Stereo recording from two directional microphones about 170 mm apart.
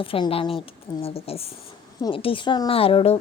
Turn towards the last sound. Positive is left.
turn(degrees=35)  # may be behind; listen again after turning